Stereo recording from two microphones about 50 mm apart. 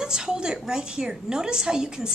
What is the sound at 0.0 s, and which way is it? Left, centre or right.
A woman's voice, centre.